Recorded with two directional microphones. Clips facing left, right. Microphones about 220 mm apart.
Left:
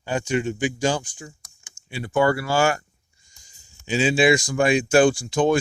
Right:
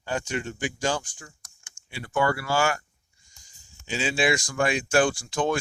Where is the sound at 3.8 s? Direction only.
15° left (ahead or behind).